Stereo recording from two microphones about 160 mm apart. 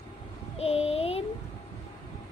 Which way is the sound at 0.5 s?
40° left (ahead or behind).